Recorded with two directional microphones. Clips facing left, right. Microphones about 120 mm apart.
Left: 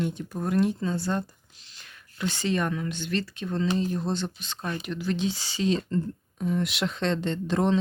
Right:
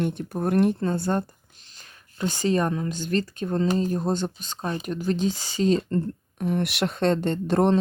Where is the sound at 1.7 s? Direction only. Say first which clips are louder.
Even; 40° right (ahead or behind).